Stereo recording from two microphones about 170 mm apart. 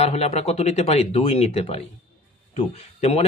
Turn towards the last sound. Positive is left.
turn(degrees=35)  # may be behind; listen again after turning